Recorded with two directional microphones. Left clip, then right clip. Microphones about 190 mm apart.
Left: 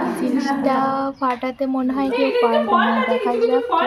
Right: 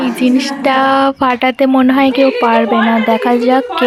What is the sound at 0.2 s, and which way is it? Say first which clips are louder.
Speech: right 7 dB; 30° right (ahead or behind).